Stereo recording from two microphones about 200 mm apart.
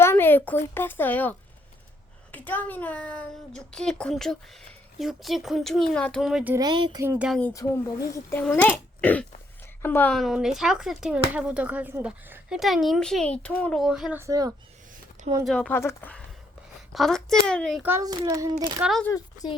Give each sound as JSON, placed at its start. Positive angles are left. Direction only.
{"t": 0.0, "sound": "a sound", "side_deg": 10}
{"t": 0.7, "sound": "speech", "side_deg": 10}
{"t": 6.6, "sound": "speech", "side_deg": -20}
{"t": 7.3, "sound": "speech", "side_deg": 5}
{"t": 7.5, "sound": "speech", "side_deg": 15}
{"t": 15.4, "sound": "speech", "side_deg": 5}
{"t": 17.8, "sound": "a child's voice", "side_deg": -15}
{"t": 18.8, "sound": "speech", "side_deg": 0}
{"t": 19.1, "sound": "speech", "side_deg": 20}